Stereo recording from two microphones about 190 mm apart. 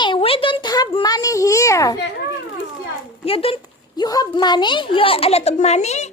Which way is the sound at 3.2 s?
30° left (ahead or behind).